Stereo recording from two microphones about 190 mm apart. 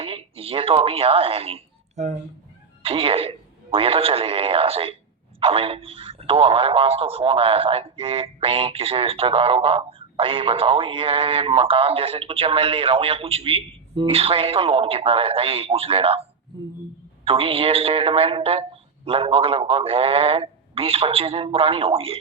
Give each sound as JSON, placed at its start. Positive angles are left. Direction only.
{"t": 0.0, "sound": "speech", "side_deg": -30}
{"t": 17.2, "sound": "speech", "side_deg": -30}